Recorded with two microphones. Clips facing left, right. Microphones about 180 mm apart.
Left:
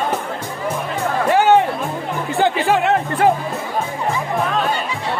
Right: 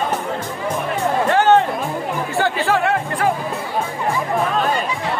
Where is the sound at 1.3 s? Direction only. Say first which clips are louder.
Left 1 dB; 10° left (ahead or behind).